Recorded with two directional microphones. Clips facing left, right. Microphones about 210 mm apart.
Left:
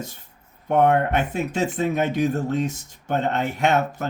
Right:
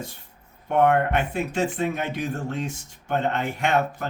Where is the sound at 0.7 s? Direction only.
40° left (ahead or behind).